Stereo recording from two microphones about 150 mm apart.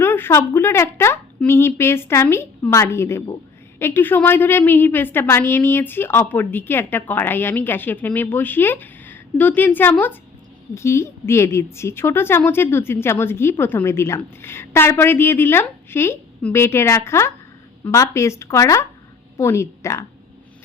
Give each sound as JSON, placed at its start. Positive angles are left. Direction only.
{"t": 0.0, "sound": "a woman's voice", "side_deg": 15}